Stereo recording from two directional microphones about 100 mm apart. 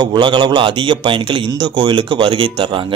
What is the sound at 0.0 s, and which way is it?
A man's voice, 50° right (ahead or behind).